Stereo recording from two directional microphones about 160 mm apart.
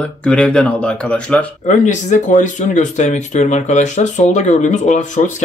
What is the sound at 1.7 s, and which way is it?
Speech, 50° left (ahead or behind).